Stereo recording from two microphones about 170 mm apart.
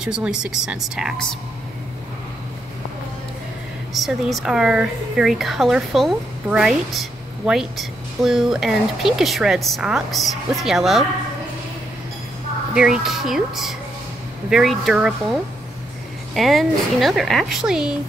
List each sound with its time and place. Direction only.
0.0 s speech: 5° right (ahead or behind)
3.9 s speech: centre (ahead or behind)
12.7 s speech: 5° right (ahead or behind)
16.3 s speech: centre (ahead or behind)